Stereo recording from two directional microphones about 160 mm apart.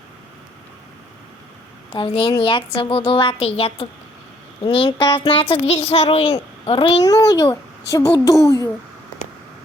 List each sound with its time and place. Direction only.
1.9 s a child's voice: 35° left (ahead or behind)
7.0 s a child's voice: 20° left (ahead or behind)